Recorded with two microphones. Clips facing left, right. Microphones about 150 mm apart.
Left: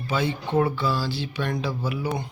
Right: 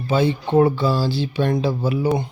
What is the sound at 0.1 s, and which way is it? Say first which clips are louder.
Speech: right 7 dB; 30° right (ahead or behind).